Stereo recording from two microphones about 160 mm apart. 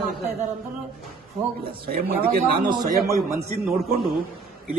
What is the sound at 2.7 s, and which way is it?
Speech, 20° right (ahead or behind).